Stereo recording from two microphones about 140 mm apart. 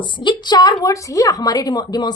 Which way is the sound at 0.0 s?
35° left (ahead or behind).